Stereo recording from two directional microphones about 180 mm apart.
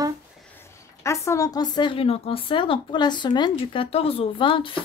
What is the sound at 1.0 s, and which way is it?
Speech, 15° left (ahead or behind).